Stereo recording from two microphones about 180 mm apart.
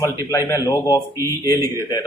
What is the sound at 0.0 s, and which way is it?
A man's voice, 15° left (ahead or behind).